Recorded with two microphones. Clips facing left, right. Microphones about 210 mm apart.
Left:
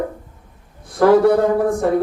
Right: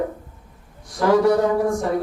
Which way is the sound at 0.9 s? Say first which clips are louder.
Left 4 dB; 55° left (ahead or behind).